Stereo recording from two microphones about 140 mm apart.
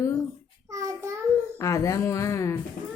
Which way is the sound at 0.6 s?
25° right (ahead or behind).